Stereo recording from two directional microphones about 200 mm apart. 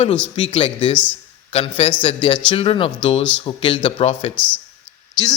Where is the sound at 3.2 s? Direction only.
5° left (ahead or behind).